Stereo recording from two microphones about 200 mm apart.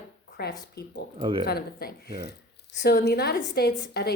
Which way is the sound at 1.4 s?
50° left (ahead or behind).